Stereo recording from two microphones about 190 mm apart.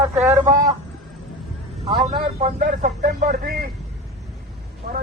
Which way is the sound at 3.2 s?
55° right (ahead or behind).